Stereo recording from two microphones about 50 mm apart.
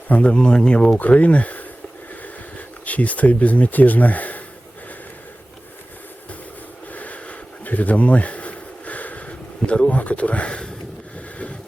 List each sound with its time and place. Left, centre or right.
0.1 s speech: left
0.9 s speech: left
6.9 s a sound: left
9.6 s speech: left